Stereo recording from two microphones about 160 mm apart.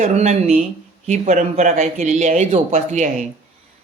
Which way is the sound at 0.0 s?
45° right (ahead or behind).